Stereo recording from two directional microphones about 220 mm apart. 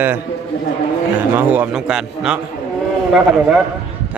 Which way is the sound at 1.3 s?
5° right (ahead or behind).